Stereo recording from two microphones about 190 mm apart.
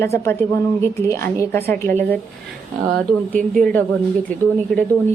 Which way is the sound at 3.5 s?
5° left (ahead or behind).